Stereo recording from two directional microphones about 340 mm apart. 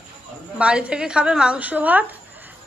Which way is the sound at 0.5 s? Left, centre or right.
Centre.